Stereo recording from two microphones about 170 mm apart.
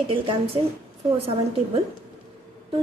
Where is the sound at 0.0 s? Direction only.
30° right (ahead or behind).